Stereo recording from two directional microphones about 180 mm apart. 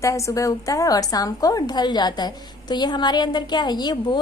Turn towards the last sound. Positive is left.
turn(degrees=25)  # may be behind; listen again after turning